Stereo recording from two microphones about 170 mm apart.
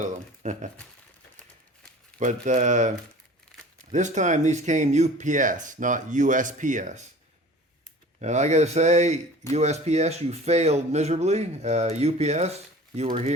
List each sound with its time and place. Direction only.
0.0 s speech: 45° right (ahead or behind)
2.1 s speech: 45° right (ahead or behind)
3.9 s speech: 45° right (ahead or behind)
8.2 s speech: 45° right (ahead or behind)